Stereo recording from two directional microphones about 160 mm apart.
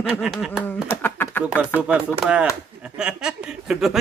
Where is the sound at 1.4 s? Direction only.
10° right (ahead or behind).